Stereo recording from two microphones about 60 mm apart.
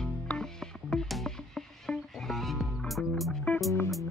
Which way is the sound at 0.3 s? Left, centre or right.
Centre.